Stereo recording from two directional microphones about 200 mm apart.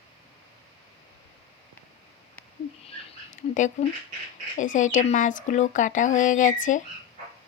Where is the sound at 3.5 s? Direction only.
40° left (ahead or behind).